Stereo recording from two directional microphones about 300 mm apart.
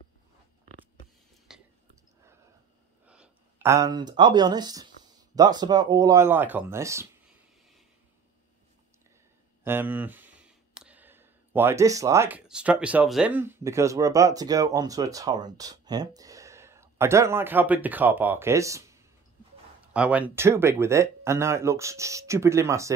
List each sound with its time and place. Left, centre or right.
1.5 s whispering: centre
3.1 s speech: centre
9.7 s speech: centre